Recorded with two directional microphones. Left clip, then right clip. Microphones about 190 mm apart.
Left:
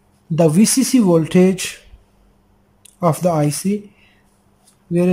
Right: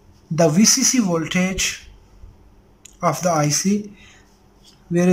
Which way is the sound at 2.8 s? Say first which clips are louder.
Left 3 dB; 20° left (ahead or behind).